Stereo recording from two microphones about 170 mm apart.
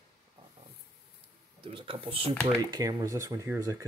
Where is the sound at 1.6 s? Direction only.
30° right (ahead or behind).